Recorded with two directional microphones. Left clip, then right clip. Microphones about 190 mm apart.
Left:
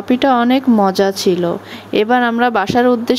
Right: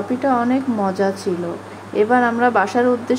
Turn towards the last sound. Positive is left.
turn(degrees=50)  # may be behind; listen again after turning